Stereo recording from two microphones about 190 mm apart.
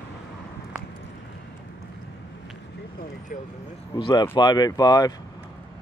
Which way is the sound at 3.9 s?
25° left (ahead or behind).